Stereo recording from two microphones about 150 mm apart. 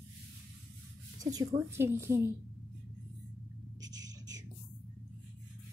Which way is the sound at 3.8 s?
25° right (ahead or behind).